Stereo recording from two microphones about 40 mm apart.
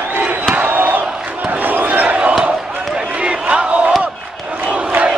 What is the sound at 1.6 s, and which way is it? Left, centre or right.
Crowd, right.